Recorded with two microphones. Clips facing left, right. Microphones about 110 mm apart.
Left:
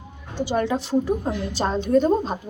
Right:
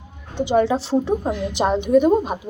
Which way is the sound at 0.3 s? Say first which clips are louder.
Right 5 dB; 20° right (ahead or behind).